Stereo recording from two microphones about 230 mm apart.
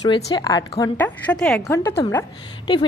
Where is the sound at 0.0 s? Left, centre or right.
Centre.